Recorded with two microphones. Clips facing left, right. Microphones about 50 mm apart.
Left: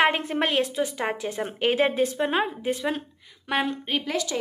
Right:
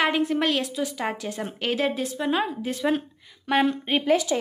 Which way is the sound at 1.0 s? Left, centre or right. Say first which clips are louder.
Left 1 dB; left.